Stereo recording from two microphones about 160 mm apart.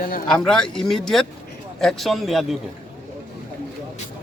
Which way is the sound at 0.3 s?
5° left (ahead or behind).